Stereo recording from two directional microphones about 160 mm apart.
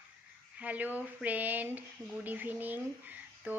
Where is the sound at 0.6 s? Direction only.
10° right (ahead or behind).